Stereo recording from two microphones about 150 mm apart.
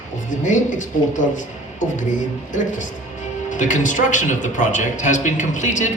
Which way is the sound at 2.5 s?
55° left (ahead or behind).